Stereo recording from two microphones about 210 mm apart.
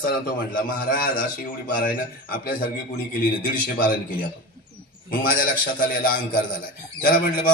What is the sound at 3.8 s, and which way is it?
A man's voice, 40° left (ahead or behind).